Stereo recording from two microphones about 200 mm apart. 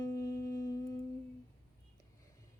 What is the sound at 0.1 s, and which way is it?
Humming, 15° left (ahead or behind).